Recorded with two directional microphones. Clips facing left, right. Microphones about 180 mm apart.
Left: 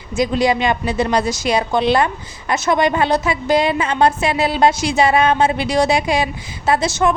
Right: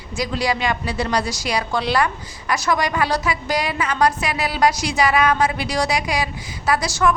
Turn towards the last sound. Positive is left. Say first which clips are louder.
# left 3 dB
turn(degrees=20)  # may be behind; listen again after turning